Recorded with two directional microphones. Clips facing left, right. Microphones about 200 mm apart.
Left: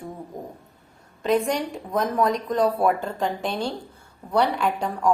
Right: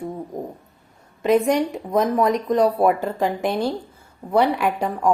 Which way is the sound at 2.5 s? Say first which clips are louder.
Right 4 dB; 20° right (ahead or behind).